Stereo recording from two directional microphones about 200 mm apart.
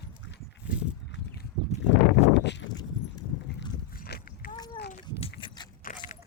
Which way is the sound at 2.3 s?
60° left (ahead or behind).